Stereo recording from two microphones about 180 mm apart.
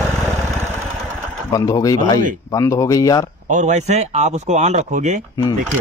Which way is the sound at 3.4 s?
45° right (ahead or behind).